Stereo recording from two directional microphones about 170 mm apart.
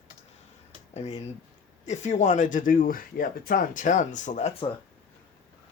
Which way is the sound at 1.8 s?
45° left (ahead or behind).